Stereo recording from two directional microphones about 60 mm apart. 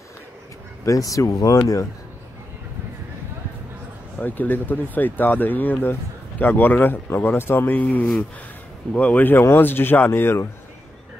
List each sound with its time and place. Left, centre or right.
0.8 s speech: left
4.2 s speech: left
9.9 s speech: left
10.2 s speech: left